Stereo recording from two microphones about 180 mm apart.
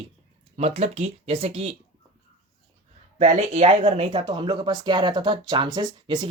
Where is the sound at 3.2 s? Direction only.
40° right (ahead or behind).